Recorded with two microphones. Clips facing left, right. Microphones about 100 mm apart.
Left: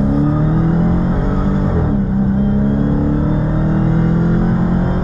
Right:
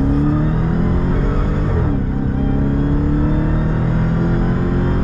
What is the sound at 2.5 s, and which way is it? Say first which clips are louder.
Music: left 3 dB; 20° left (ahead or behind).